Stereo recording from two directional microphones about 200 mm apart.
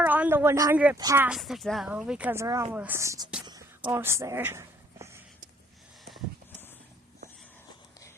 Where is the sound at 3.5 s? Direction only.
20° right (ahead or behind).